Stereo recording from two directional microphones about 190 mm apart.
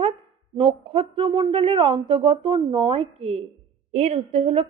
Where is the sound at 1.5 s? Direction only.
30° right (ahead or behind).